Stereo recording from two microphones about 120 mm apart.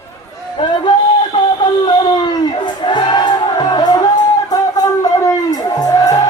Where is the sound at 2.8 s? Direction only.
40° left (ahead or behind).